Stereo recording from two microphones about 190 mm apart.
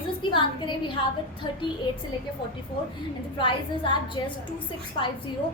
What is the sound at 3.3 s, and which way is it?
Speech, 25° left (ahead or behind).